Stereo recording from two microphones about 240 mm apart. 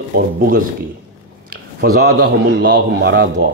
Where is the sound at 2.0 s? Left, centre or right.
Right.